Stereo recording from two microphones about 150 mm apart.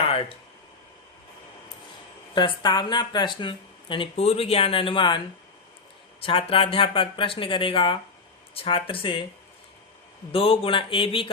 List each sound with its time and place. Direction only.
2.3 s speech: 30° left (ahead or behind)
6.2 s speech: 35° left (ahead or behind)
10.3 s speech: 35° left (ahead or behind)